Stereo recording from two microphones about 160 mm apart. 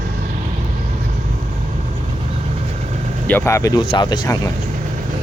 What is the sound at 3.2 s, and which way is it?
Speech, 10° left (ahead or behind).